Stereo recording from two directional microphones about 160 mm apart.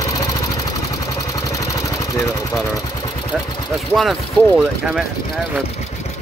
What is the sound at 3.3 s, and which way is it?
Speech, centre (ahead or behind).